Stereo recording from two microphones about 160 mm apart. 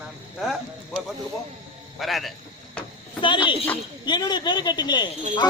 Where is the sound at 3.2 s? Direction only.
30° left (ahead or behind).